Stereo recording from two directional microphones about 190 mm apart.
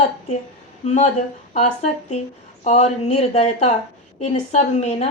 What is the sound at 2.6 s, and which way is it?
A woman's voice, 35° left (ahead or behind).